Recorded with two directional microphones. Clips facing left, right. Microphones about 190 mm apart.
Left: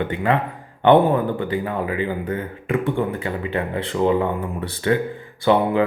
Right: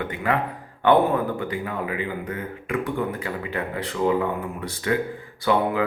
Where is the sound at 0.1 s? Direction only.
25° left (ahead or behind).